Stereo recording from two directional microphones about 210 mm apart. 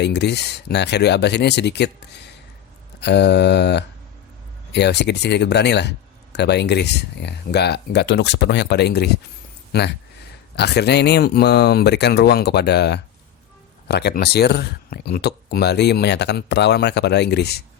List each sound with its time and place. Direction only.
0.0 s speech: 55° left (ahead or behind)